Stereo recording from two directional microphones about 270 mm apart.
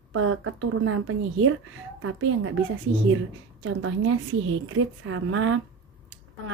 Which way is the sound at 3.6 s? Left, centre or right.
Right.